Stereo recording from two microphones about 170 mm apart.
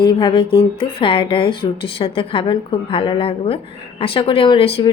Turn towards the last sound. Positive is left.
turn(degrees=35)  # may be behind; listen again after turning